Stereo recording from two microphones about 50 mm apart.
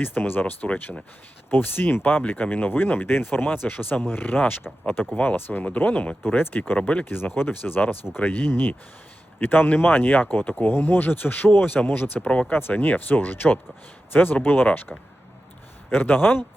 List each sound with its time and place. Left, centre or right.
0.0 s speech: left
6.7 s speech: left
7.0 s speech: left
12.2 s speech: left
12.5 s speech: left